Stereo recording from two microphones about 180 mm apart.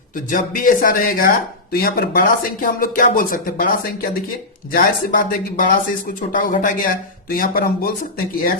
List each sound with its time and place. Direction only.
0.3 s speech: 50° left (ahead or behind)